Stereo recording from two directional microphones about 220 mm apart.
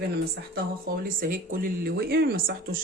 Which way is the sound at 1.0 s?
40° right (ahead or behind).